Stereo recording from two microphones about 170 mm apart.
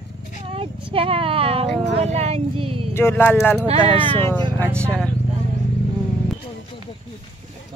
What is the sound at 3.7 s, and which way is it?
Speech, 30° right (ahead or behind).